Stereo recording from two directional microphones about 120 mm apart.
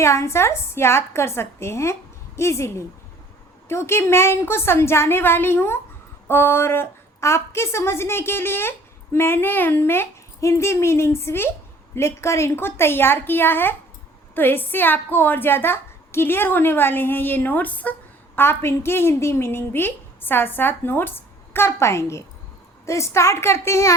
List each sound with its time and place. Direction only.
0.0 s a woman's voice: 25° left (ahead or behind)